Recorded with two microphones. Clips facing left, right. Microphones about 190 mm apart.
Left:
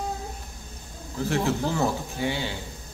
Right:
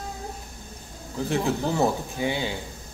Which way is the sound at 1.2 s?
15° right (ahead or behind).